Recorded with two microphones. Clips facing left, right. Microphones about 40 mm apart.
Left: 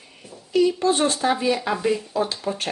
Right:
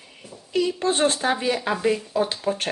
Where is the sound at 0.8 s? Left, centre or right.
Right.